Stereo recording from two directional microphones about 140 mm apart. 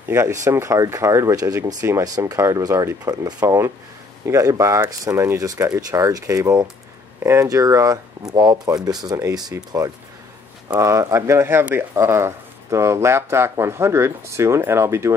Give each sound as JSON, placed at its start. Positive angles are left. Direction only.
{"t": 0.1, "sound": "speech", "side_deg": -20}